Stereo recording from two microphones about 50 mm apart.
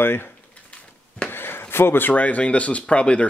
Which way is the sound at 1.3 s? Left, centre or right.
Left.